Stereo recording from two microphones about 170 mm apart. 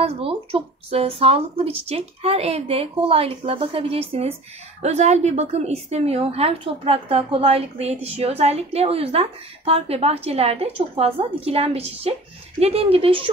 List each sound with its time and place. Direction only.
0.0 s a woman's voice: 35° right (ahead or behind)